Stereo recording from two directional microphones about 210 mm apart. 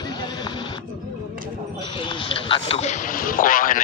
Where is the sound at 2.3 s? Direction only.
25° left (ahead or behind); by 3.7 s 40° left (ahead or behind).